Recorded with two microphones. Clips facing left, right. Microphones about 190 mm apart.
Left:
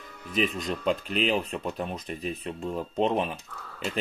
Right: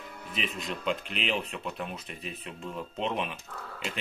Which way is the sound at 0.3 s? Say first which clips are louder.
Left 8 dB; 40° left (ahead or behind).